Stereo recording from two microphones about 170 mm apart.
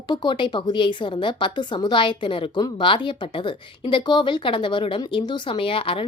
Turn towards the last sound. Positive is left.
turn(degrees=30)  # may be behind; listen again after turning